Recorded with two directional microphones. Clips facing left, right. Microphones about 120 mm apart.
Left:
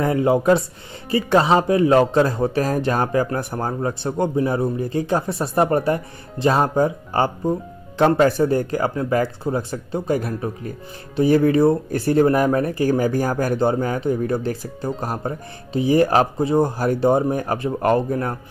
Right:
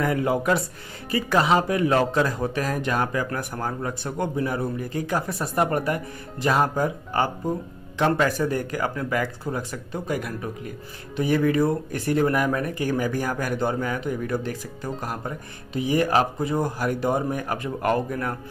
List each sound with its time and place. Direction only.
0.0 s speech: 25° left (ahead or behind)